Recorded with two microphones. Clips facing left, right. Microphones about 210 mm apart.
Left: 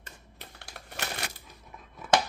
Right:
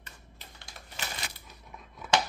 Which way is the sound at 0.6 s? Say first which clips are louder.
Left 4 dB; 65° left (ahead or behind).